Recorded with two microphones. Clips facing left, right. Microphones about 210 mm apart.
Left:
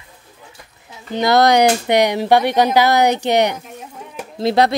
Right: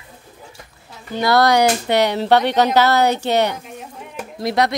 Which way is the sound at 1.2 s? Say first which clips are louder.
Left 2 dB; 20° left (ahead or behind).